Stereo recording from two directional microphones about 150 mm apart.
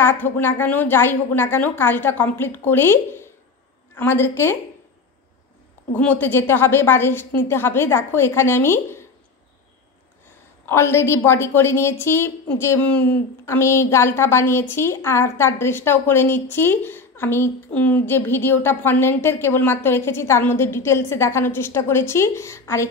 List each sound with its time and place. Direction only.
0.0 s a woman's voice: 15° left (ahead or behind)
5.9 s a woman's voice: 10° left (ahead or behind)
10.6 s a woman's voice: 15° left (ahead or behind)